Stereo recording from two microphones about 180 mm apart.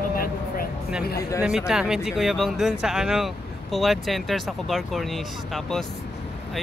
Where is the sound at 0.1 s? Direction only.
55° left (ahead or behind).